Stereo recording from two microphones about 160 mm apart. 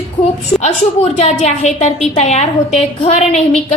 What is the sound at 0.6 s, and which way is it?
A woman's voice, 45° left (ahead or behind).